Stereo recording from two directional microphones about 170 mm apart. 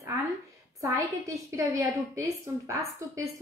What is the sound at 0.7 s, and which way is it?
A woman's voice, 20° right (ahead or behind).